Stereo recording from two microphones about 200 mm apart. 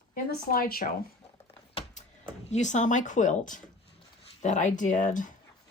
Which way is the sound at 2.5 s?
35° left (ahead or behind).